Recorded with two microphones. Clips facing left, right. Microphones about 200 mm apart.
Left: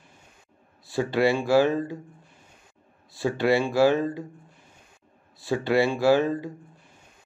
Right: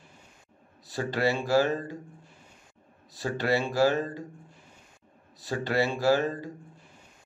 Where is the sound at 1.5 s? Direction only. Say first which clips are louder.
Left 3 dB; 15° left (ahead or behind).